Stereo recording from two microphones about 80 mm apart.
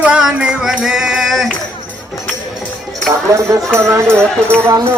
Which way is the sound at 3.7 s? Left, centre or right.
Right.